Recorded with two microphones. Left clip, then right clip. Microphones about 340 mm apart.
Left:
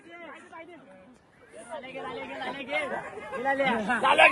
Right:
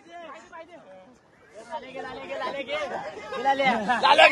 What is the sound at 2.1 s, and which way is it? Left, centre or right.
Speech, right.